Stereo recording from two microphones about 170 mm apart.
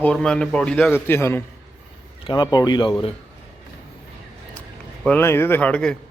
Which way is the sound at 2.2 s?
25° left (ahead or behind).